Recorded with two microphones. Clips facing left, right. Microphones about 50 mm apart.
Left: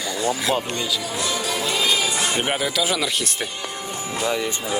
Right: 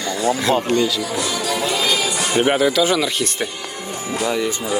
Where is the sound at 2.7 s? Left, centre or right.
Centre.